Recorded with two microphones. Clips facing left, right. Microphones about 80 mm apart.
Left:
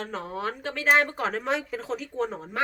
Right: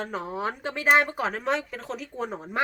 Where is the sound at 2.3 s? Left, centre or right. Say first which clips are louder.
Right 2 dB; centre.